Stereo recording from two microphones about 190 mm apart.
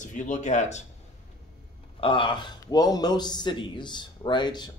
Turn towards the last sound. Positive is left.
turn(degrees=20)  # may be behind; listen again after turning